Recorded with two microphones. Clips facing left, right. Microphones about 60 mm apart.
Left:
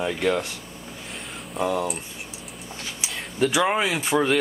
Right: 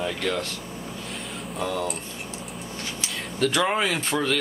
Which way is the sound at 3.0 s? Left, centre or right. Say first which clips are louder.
Left 2 dB; centre.